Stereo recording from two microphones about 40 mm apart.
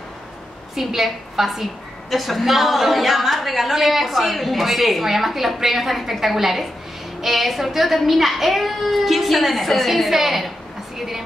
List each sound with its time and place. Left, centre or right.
0.7 s a woman's voice: centre